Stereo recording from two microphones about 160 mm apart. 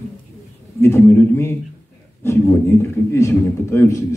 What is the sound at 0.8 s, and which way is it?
A man's voice, 15° left (ahead or behind).